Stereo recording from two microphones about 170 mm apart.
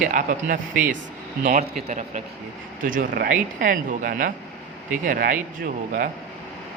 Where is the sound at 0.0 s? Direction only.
50° right (ahead or behind).